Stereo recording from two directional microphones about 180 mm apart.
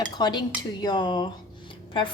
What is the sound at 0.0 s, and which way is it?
Dishes, 25° left (ahead or behind).